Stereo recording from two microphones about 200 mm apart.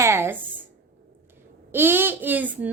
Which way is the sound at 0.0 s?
15° right (ahead or behind).